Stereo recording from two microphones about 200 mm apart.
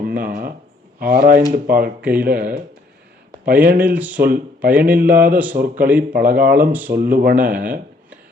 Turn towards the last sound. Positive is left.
turn(degrees=-45)  # may be behind; listen again after turning